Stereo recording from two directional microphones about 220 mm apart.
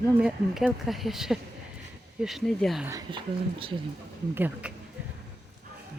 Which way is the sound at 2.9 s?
20° right (ahead or behind).